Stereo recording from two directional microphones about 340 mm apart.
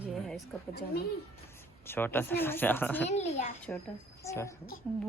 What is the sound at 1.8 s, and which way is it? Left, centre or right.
A woman's voice, centre.